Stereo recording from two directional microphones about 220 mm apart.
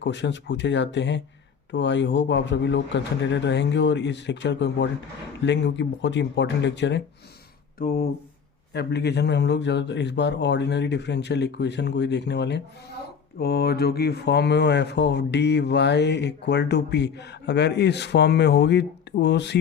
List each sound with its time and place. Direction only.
0.0 s speech: 55° left (ahead or behind)
7.8 s speech: 40° left (ahead or behind)